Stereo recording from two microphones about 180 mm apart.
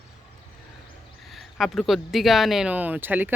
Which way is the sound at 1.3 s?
Centre (ahead or behind).